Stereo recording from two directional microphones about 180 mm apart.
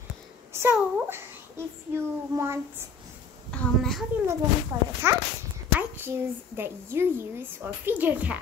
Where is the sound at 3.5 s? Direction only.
5° left (ahead or behind).